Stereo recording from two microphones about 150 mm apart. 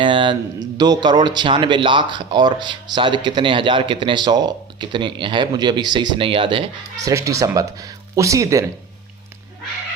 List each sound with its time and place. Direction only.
0.0 s a sound: 35° right (ahead or behind)
0.8 s speech: 30° right (ahead or behind)
7.0 s speech: 20° right (ahead or behind)